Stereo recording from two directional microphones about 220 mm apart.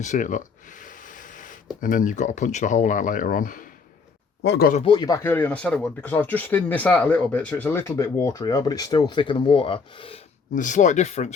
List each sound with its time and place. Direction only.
0.0 s a sound: 35° left (ahead or behind)
1.8 s speech: 40° left (ahead or behind)
4.8 s speech: 20° left (ahead or behind)
10.5 s speech: 35° left (ahead or behind)